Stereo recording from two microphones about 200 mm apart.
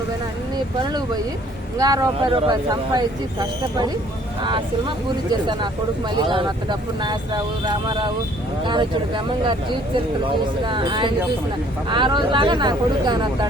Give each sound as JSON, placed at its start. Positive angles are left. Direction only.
{"t": 0.5, "sound": "speech", "side_deg": -20}
{"t": 6.1, "sound": "speech", "side_deg": -25}
{"t": 10.6, "sound": "speech", "side_deg": -25}